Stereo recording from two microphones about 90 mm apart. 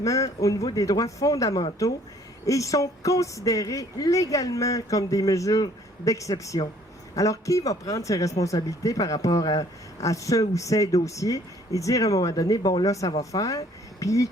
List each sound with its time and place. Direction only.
0.0 s speech: 40° left (ahead or behind)